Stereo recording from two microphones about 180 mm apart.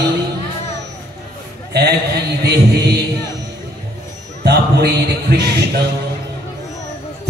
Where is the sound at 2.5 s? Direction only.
65° right (ahead or behind).